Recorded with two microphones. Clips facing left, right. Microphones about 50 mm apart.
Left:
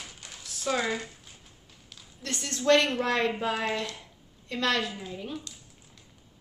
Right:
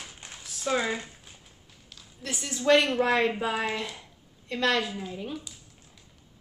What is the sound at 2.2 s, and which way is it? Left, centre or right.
A woman's voice, centre.